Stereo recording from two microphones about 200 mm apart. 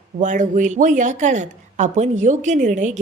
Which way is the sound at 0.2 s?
40° right (ahead or behind).